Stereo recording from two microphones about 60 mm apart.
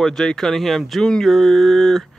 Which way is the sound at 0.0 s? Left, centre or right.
Centre.